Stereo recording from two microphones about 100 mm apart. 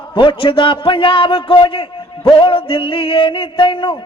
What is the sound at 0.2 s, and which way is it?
Music, 55° left (ahead or behind).